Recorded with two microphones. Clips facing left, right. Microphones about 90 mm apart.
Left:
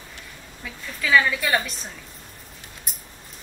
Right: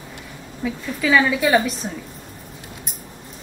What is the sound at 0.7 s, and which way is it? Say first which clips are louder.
A woman's voice: right 5 dB; 5° right (ahead or behind).